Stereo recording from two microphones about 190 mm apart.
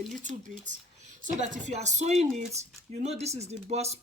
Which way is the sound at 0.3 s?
40° right (ahead or behind).